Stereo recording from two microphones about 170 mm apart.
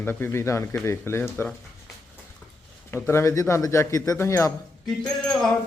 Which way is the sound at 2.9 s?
15° left (ahead or behind).